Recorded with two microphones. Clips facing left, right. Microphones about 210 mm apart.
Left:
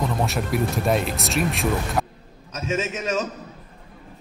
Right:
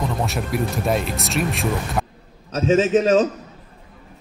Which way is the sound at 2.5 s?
30° right (ahead or behind).